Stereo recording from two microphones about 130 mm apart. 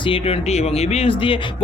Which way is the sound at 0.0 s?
45° left (ahead or behind).